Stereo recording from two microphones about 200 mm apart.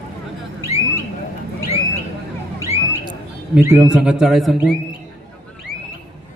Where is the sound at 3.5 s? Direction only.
10° right (ahead or behind).